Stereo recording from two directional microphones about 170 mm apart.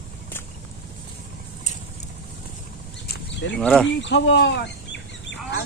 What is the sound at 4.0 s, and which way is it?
Speech, 90° left.